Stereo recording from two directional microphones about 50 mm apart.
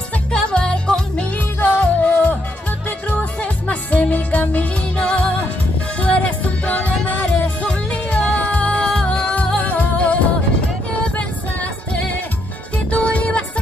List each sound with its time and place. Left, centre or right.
0.3 s music: centre
1.8 s music: left